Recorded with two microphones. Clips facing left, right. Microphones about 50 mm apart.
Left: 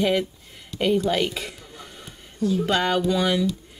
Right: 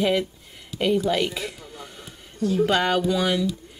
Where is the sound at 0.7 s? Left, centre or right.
Centre.